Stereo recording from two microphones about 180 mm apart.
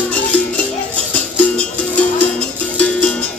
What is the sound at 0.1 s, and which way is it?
Music, 5° left (ahead or behind).